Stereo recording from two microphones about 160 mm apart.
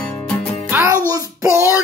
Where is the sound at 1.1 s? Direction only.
15° right (ahead or behind).